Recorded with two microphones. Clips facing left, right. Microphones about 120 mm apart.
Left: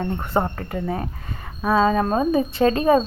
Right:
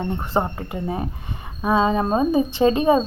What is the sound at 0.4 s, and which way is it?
A woman's voice, 15° right (ahead or behind).